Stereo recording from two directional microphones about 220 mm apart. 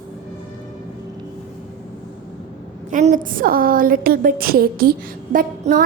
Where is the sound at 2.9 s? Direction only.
35° right (ahead or behind).